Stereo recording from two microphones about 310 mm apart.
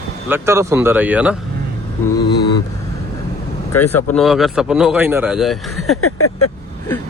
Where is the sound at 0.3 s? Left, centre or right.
Centre.